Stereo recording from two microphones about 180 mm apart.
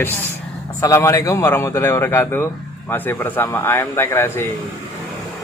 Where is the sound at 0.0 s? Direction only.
10° left (ahead or behind).